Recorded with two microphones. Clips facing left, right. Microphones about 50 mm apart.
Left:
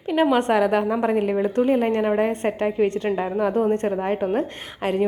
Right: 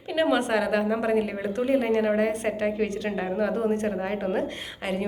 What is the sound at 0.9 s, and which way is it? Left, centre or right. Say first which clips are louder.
Speech: left 3 dB; centre.